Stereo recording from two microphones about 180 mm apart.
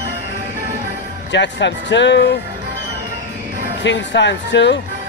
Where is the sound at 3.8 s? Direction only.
85° left.